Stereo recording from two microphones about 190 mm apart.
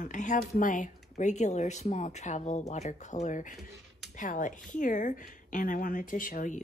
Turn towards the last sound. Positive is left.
turn(degrees=45)  # may be behind; listen again after turning